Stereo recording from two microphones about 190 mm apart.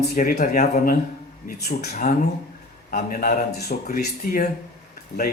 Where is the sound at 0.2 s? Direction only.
40° left (ahead or behind).